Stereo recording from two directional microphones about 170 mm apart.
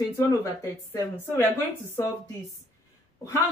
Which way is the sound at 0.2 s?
20° left (ahead or behind).